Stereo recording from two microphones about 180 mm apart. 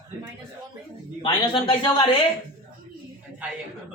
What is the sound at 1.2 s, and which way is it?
Speech, 25° left (ahead or behind).